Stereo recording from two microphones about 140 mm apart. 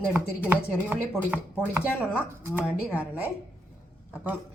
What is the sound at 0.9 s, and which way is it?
Speech, 10° right (ahead or behind).